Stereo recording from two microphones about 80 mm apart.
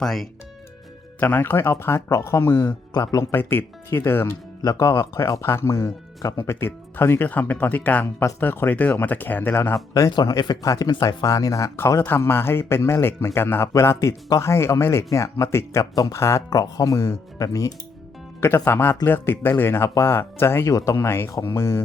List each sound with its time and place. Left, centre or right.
0.0 s speech: centre
1.2 s speech: left
2.9 s speech: left
3.3 s speech: left
4.6 s speech: left
9.7 s speech: left
16.5 s speech: left
18.4 s speech: left
20.7 s speech: left